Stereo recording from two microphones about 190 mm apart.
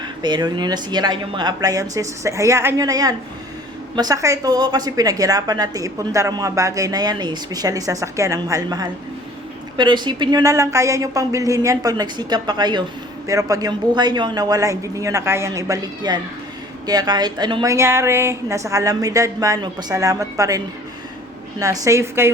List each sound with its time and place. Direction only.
0.0 s a woman's voice: 25° right (ahead or behind)
21.6 s speech: 15° right (ahead or behind)